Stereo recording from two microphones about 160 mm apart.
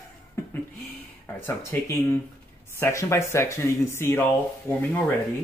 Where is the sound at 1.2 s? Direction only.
15° left (ahead or behind).